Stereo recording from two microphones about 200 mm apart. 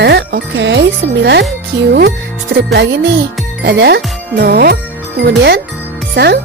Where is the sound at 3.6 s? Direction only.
55° right (ahead or behind).